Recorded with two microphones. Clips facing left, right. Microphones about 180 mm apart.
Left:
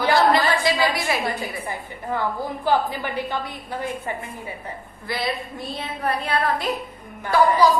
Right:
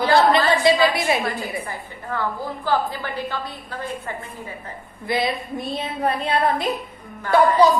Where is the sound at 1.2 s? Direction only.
15° left (ahead or behind).